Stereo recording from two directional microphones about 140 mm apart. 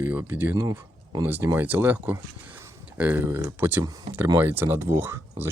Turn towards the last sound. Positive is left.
turn(degrees=-15)  # may be behind; listen again after turning